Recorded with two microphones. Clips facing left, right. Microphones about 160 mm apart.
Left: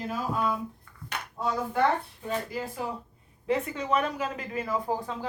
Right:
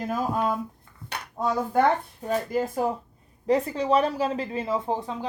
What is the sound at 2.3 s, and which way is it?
Speech, 45° right (ahead or behind).